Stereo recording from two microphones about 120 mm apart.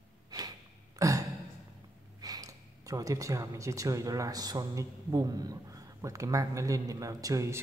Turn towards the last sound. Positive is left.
turn(degrees=-25)  # may be behind; listen again after turning